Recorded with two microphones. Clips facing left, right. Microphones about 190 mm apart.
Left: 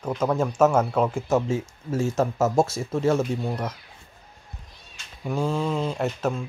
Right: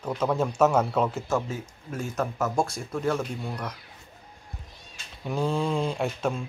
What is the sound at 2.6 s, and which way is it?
Speech, 5° left (ahead or behind).